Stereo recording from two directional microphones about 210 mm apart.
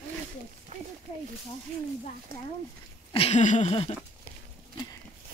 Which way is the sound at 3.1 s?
30° left (ahead or behind).